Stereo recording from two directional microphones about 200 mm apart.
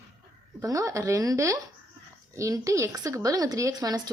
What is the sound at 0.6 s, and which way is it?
Speech, 15° right (ahead or behind).